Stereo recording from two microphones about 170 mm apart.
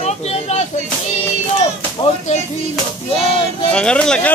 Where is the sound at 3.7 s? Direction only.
5° left (ahead or behind).